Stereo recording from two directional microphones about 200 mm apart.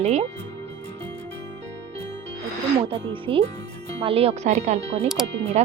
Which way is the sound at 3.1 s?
25° right (ahead or behind).